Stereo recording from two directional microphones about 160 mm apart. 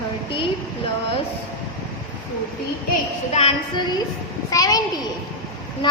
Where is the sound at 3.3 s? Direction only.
35° left (ahead or behind).